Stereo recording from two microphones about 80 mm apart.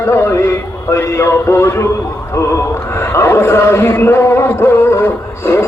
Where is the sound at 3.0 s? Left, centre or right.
Left.